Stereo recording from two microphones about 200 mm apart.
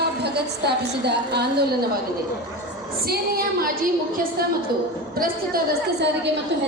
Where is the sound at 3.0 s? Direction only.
50° right (ahead or behind).